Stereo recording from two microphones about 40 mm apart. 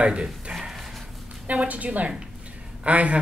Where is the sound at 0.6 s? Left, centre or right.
Centre.